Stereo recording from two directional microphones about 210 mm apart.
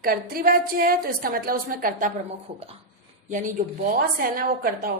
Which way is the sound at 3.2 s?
40° right (ahead or behind).